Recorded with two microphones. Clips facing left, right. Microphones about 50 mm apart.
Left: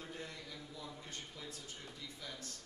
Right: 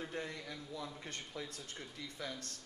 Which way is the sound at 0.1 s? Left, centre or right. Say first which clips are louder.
Right 5 dB; right.